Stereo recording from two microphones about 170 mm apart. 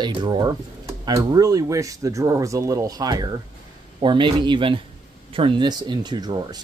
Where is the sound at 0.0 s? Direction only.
25° right (ahead or behind).